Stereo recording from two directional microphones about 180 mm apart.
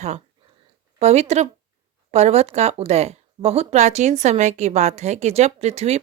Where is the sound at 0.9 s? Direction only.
35° right (ahead or behind).